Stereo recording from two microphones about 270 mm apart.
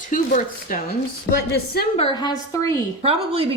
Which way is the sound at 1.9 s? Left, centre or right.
Centre.